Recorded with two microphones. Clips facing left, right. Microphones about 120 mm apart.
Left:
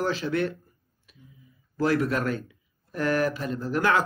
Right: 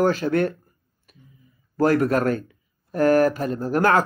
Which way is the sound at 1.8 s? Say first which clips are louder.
Right 6 dB; 45° right (ahead or behind).